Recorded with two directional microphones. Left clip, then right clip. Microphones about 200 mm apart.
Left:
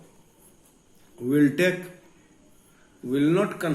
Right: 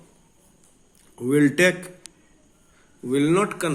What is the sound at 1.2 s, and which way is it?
Speech, 50° right (ahead or behind).